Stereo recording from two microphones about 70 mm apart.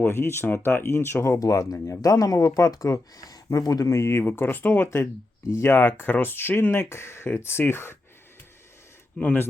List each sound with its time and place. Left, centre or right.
0.0 s speech: left
9.1 s speech: left